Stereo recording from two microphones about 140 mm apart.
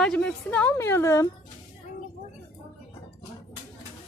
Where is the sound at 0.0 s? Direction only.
5° left (ahead or behind).